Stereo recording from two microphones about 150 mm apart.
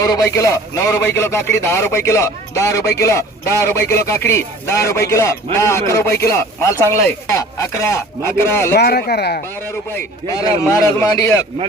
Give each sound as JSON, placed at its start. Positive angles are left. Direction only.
{"t": 0.0, "sound": "a man's voice", "side_deg": 20}
{"t": 8.7, "sound": "speech", "side_deg": 90}
{"t": 10.7, "sound": "a man's voice", "side_deg": 25}